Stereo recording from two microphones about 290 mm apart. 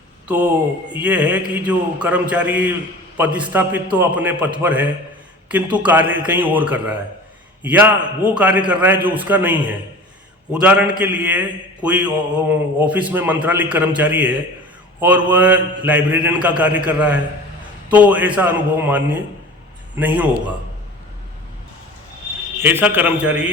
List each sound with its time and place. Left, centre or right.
0.3 s a man's voice: centre
22.6 s a man's voice: centre